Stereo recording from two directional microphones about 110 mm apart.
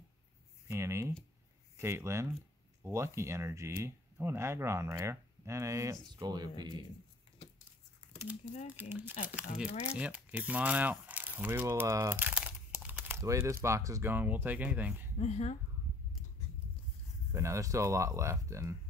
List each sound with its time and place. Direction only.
0.7 s speech: 25° right (ahead or behind)
6.1 s speech: 40° right (ahead or behind)
8.7 s speech: 20° right (ahead or behind)
12.0 s crumpling: 20° right (ahead or behind)
13.2 s speech: 30° right (ahead or behind)
15.1 s a woman's voice: 80° left
17.3 s speech: 25° right (ahead or behind)